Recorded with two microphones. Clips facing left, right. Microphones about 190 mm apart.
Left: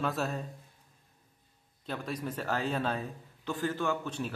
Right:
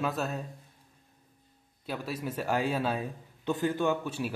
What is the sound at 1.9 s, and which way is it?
A man's voice, 5° right (ahead or behind).